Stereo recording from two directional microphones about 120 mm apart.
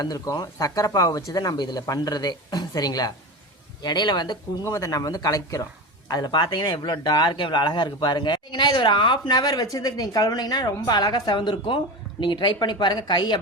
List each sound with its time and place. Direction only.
0.0 s speech: 30° left (ahead or behind)